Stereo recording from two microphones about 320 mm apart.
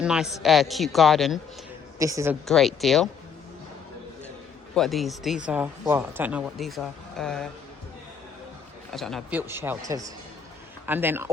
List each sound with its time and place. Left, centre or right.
0.0 s a man's voice: centre
2.5 s speech: centre
4.7 s speech: centre
8.9 s speech: centre